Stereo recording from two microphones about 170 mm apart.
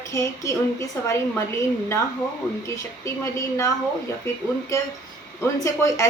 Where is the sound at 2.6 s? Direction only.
20° left (ahead or behind).